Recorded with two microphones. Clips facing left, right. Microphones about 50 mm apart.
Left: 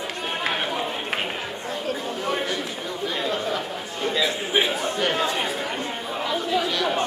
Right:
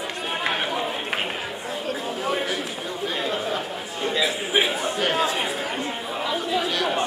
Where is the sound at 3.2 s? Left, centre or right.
Centre.